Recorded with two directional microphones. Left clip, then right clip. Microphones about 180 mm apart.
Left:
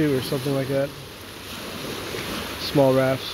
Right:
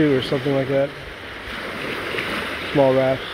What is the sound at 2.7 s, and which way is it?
Speech, 5° left (ahead or behind).